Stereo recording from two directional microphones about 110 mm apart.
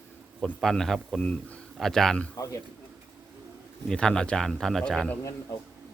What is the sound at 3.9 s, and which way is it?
Speech, 5° left (ahead or behind).